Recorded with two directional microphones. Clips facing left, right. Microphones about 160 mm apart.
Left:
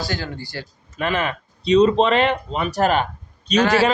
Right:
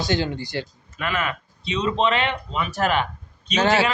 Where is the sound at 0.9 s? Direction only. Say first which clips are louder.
Left 4 dB; 35° left (ahead or behind).